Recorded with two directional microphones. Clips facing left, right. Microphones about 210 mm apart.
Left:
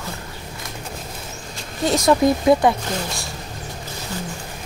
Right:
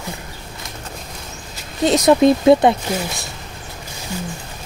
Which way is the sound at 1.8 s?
20° right (ahead or behind).